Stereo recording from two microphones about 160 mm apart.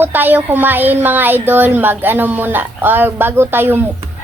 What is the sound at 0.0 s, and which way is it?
Speech, 10° right (ahead or behind).